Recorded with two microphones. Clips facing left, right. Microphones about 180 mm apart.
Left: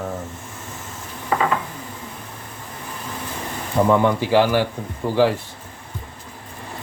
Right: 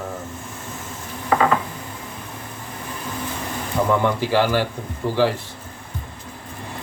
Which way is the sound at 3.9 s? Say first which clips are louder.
Left 3 dB; 15° left (ahead or behind).